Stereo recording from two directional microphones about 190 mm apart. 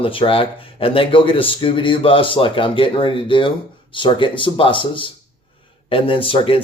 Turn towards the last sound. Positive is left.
turn(degrees=30)  # may be behind; listen again after turning